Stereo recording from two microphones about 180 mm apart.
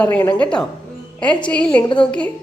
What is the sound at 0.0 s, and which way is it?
A child's voice, 5° left (ahead or behind).